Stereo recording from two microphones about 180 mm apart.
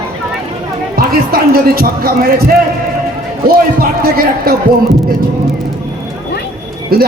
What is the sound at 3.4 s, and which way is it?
A man's voice, 55° right (ahead or behind).